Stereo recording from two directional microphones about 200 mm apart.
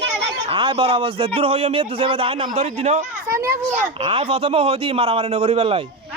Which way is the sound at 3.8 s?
30° right (ahead or behind).